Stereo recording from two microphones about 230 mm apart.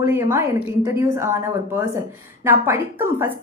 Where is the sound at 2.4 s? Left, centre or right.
Centre.